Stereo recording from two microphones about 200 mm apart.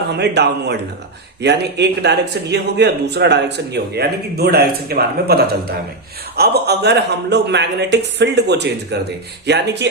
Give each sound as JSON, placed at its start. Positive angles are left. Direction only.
{"t": 0.1, "sound": "a man's voice", "side_deg": -55}